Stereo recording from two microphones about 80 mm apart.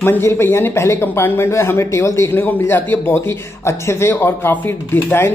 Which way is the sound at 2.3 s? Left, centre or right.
Left.